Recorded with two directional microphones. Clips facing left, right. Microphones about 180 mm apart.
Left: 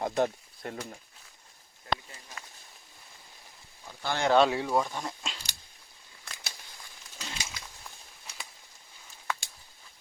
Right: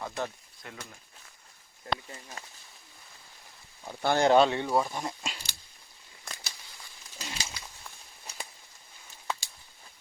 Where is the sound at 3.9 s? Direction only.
45° right (ahead or behind).